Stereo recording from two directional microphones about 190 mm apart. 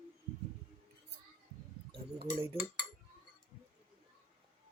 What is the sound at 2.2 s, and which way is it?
Cutlery, 30° right (ahead or behind).